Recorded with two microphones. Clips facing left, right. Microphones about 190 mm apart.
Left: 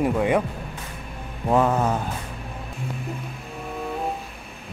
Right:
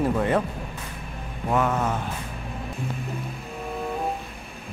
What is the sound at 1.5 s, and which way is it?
Mantra, 30° left (ahead or behind).